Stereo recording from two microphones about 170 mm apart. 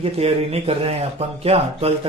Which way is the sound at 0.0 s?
35° right (ahead or behind).